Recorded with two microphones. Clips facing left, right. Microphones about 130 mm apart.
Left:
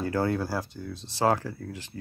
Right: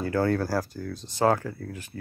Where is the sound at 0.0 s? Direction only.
25° left (ahead or behind).